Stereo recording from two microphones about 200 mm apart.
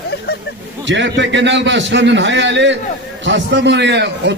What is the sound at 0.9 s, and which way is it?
A man's voice, 65° right (ahead or behind).